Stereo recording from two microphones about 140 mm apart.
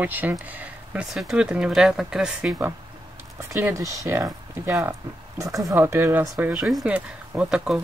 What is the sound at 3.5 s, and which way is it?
Speech, 20° right (ahead or behind).